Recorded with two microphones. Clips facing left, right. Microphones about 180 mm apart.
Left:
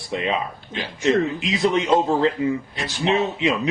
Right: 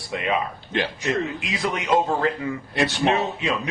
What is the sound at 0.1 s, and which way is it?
Speech, 25° left (ahead or behind).